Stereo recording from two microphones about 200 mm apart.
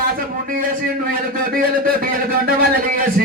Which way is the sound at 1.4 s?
45° right (ahead or behind).